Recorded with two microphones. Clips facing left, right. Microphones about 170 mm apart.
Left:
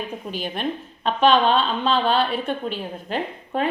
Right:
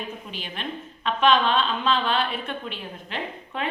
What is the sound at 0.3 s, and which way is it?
A woman's voice, 40° left (ahead or behind).